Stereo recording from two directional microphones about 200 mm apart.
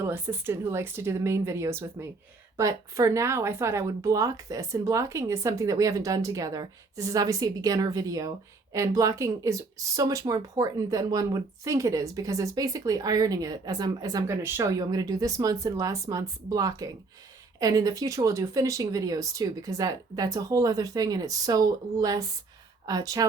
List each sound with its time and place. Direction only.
0.0 s speech: 10° right (ahead or behind)